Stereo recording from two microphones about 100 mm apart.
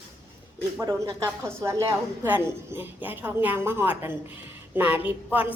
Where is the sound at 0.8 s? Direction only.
35° right (ahead or behind).